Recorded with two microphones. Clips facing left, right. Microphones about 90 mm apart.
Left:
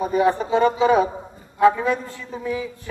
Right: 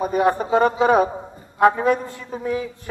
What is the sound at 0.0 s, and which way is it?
A man's voice, 50° right (ahead or behind).